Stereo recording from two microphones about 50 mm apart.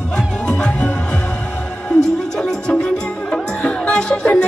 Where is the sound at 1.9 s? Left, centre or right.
Centre.